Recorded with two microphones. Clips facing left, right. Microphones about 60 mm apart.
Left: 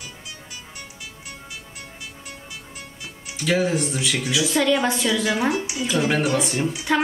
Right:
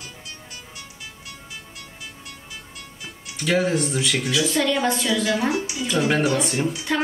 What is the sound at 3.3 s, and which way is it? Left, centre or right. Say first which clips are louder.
A woman's voice: even; centre.